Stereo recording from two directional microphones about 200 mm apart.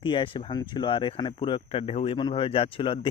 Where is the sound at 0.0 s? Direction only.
25° left (ahead or behind).